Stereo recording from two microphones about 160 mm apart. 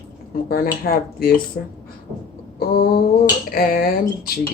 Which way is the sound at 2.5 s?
75° left (ahead or behind).